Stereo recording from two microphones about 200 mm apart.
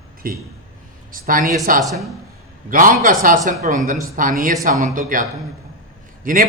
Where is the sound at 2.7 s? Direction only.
40° right (ahead or behind).